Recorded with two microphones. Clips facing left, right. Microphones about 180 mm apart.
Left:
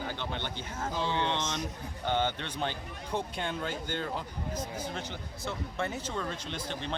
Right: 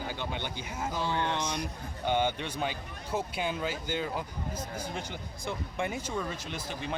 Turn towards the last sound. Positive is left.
turn(degrees=-10)  # may be behind; listen again after turning